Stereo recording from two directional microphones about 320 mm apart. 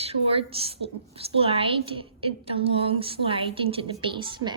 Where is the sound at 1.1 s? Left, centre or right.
Centre.